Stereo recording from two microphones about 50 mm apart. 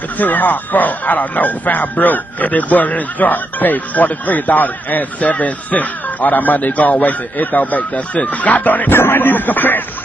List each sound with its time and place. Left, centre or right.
0.2 s speech: left